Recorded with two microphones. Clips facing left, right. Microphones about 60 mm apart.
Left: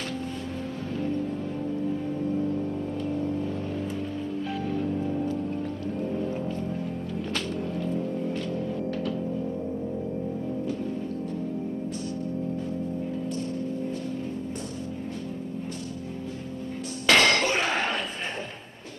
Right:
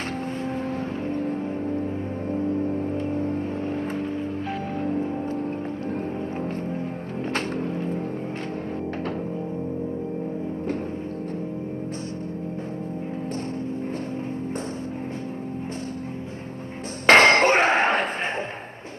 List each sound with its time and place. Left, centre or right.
0.9 s music: right
8.9 s music: right
10.7 s music: right
17.0 s a sound: right